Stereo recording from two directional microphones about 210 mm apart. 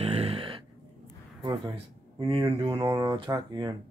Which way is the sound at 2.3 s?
25° right (ahead or behind).